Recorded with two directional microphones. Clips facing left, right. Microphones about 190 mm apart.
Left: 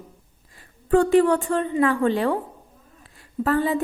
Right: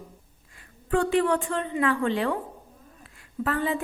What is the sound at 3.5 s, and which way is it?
Speech, 35° left (ahead or behind).